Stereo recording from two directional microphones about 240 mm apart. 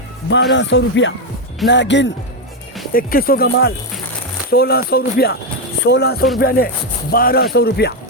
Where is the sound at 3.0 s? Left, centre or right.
Left.